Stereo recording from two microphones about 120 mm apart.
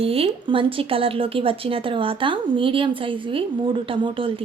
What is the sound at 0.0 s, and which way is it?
A woman's voice, 55° right (ahead or behind).